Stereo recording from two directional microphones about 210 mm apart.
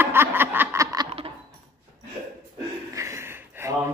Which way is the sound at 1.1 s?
30° right (ahead or behind).